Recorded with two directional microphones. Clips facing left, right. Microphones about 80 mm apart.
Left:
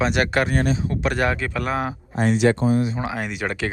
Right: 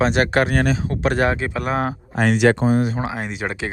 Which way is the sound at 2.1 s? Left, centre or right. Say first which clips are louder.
Right 2 dB; right.